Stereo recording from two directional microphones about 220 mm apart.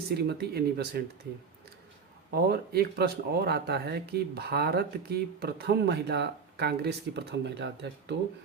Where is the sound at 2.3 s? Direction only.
45° right (ahead or behind).